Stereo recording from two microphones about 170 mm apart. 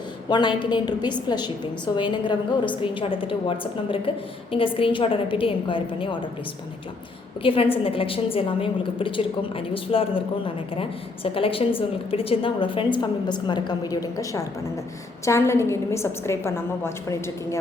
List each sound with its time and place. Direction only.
0.3 s a woman's voice: 25° left (ahead or behind)
7.4 s a woman's voice: 30° left (ahead or behind); by 17.6 s 15° left (ahead or behind)